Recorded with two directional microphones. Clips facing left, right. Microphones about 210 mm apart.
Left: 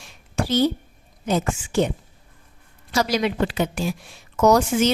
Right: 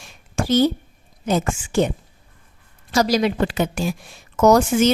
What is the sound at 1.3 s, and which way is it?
Speech, 45° right (ahead or behind).